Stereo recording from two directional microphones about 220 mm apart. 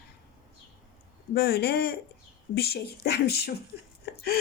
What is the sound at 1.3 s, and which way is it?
A woman's voice, 45° left (ahead or behind).